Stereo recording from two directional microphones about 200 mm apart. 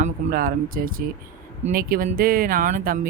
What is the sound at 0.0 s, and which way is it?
Speech, 45° right (ahead or behind).